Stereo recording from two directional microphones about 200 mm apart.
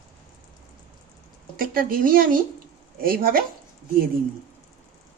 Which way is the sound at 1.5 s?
45° right (ahead or behind).